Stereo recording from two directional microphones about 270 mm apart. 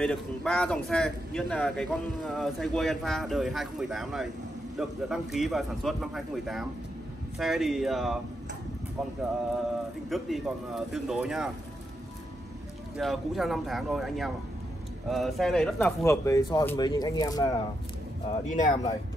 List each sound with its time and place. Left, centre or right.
0.0 s speech: centre
10.0 s speech: centre
12.9 s speech: centre
18.5 s speech: left